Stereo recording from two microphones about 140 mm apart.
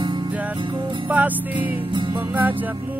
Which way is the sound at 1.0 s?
10° right (ahead or behind).